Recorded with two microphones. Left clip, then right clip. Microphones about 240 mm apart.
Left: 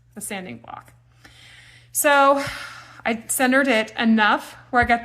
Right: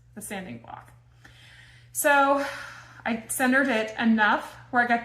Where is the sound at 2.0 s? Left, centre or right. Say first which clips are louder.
Left 5 dB; left.